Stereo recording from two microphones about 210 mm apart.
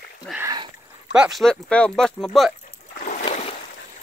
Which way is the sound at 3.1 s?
30° left (ahead or behind).